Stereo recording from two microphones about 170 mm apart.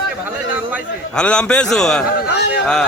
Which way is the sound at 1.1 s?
5° left (ahead or behind).